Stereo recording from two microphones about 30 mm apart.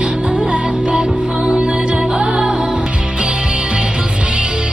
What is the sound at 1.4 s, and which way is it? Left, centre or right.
Music, right.